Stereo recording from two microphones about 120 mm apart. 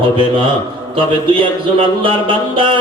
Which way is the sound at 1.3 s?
45° right (ahead or behind).